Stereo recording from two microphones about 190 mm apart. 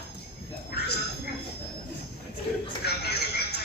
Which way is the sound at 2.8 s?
60° left (ahead or behind).